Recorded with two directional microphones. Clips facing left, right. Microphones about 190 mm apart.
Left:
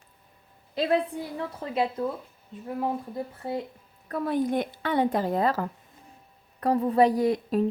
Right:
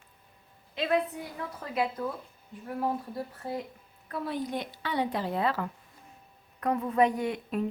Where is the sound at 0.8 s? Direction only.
30° left (ahead or behind).